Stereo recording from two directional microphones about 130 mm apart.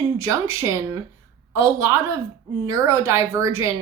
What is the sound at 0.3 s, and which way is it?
A woman's voice, 20° right (ahead or behind).